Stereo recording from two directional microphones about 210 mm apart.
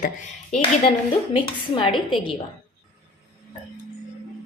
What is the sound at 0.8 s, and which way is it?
Speech, 25° left (ahead or behind).